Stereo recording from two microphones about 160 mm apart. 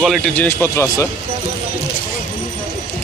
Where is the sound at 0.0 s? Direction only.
5° left (ahead or behind).